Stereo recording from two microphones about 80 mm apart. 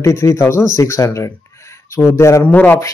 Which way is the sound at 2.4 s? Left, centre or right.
Left.